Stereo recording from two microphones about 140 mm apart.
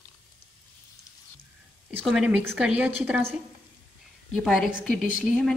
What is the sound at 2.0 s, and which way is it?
Speech, 5° right (ahead or behind).